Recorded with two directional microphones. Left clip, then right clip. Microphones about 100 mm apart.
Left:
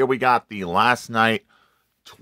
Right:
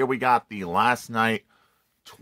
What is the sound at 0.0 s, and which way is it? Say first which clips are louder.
Speech: left 3 dB; 40° left (ahead or behind).